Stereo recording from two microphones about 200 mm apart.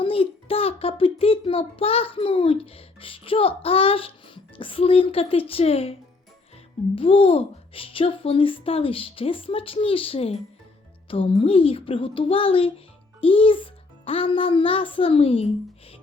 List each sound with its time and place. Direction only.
0.0 s a child's voice: 30° left (ahead or behind)
6.9 s speech: 30° left (ahead or behind)